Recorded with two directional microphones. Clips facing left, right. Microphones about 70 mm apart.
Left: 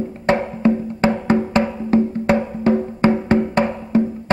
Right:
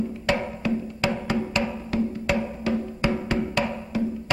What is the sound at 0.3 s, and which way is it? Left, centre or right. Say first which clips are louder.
Wood block: left 9 dB; left.